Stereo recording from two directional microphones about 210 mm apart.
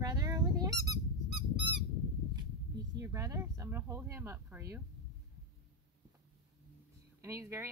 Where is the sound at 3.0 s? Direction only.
15° right (ahead or behind).